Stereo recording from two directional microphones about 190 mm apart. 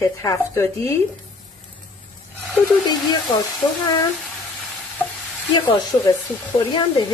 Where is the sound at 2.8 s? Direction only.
20° left (ahead or behind).